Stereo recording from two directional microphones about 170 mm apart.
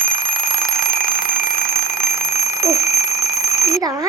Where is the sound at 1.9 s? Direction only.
15° right (ahead or behind).